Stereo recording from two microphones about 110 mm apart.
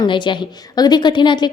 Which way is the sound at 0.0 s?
45° left (ahead or behind).